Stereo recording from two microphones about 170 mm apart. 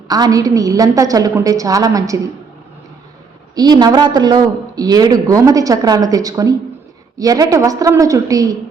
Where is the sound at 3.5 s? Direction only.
25° right (ahead or behind).